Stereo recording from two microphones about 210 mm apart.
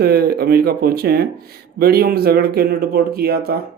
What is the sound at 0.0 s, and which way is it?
Speech, 50° right (ahead or behind).